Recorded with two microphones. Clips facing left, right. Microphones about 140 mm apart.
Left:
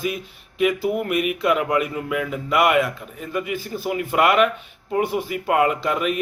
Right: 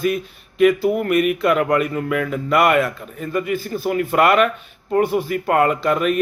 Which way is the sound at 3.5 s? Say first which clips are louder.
Right 5 dB; 45° right (ahead or behind).